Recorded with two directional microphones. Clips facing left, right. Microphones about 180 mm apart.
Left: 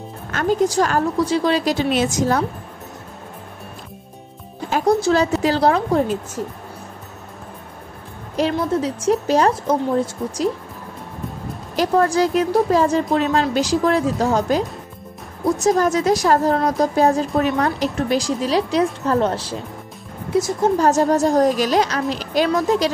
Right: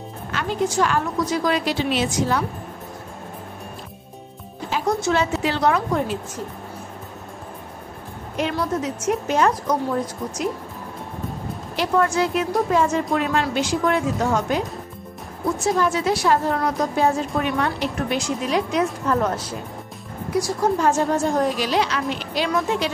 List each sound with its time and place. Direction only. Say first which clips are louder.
0.3 s a woman's voice: left 5 dB; 45° left (ahead or behind)
1.6 s a woman's voice: left 3 dB; 45° left (ahead or behind)
4.8 s a woman's voice: left 5 dB; 35° left (ahead or behind)
8.5 s a woman's voice: left 3 dB; 30° left (ahead or behind)
11.7 s a woman's voice: left 3 dB; 40° left (ahead or behind); by 20.7 s 20° left (ahead or behind)
20.7 s a woman's voice: left 5 dB; 40° left (ahead or behind)